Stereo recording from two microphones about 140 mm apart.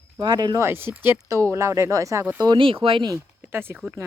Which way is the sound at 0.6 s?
15° right (ahead or behind).